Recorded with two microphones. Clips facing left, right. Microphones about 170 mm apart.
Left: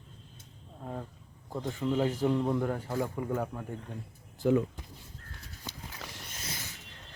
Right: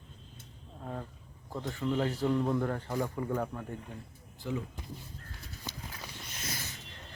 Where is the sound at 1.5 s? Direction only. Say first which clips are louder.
Left 2 dB; 15° left (ahead or behind).